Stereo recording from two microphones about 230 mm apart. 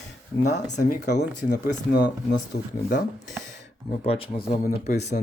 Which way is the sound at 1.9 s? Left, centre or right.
Left.